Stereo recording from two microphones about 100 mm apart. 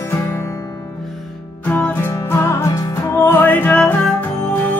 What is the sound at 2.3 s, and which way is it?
Music, 30° left (ahead or behind).